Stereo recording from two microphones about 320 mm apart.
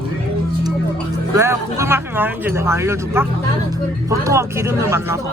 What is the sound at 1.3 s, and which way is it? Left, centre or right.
Speech, centre.